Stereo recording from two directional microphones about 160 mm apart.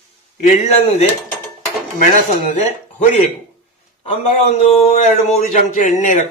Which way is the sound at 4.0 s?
35° left (ahead or behind).